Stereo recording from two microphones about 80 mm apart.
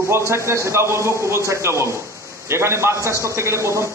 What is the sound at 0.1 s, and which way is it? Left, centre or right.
A man's voice, right.